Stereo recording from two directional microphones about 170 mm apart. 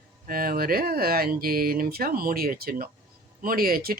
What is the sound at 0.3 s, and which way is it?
Speech, 55° right (ahead or behind).